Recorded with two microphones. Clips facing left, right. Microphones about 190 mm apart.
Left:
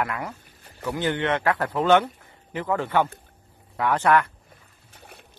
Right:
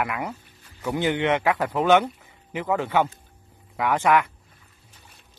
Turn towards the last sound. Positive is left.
turn(degrees=65)  # may be behind; listen again after turning